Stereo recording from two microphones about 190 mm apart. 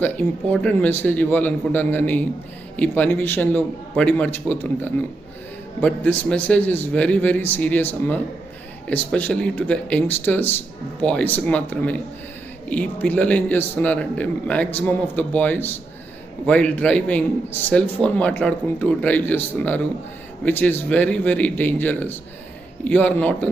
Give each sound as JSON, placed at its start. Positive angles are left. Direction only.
{"t": 0.0, "sound": "a man's voice", "side_deg": 5}